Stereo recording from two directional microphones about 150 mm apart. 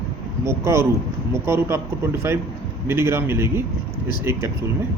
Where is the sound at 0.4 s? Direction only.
20° right (ahead or behind).